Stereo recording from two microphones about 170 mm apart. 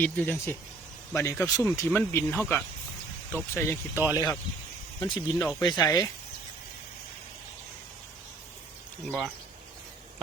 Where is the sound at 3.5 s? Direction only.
15° left (ahead or behind).